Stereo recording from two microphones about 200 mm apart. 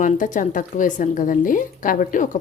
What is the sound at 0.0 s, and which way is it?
Speech, 40° left (ahead or behind).